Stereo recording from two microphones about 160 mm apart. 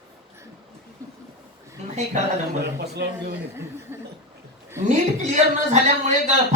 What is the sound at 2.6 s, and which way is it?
Speech, 90° right.